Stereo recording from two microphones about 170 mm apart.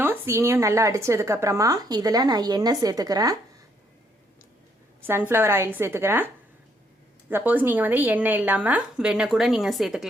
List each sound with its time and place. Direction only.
0.0 s speech: 15° right (ahead or behind)
5.0 s a woman's voice: 15° right (ahead or behind)